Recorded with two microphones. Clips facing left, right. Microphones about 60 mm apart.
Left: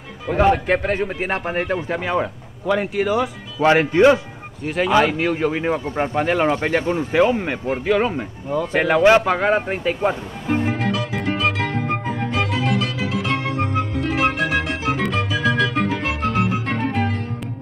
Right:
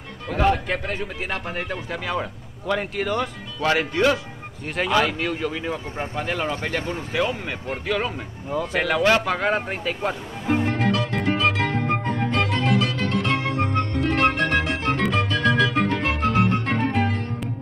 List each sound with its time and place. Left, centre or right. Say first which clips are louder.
0.3 s speech: left 4 dB; centre
0.8 s speech: left 7 dB; left
2.6 s speech: left 5 dB; centre
3.6 s speech: left 7 dB; left
4.6 s speech: left 5 dB; centre
4.9 s speech: left 4 dB; centre
5.4 s speech: left 6 dB; left; by 10.1 s centre
10.4 s music: even; centre